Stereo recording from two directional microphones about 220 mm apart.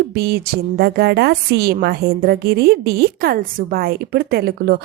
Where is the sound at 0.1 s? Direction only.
45° right (ahead or behind).